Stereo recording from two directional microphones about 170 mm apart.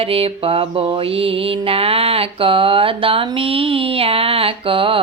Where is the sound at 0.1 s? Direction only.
35° right (ahead or behind).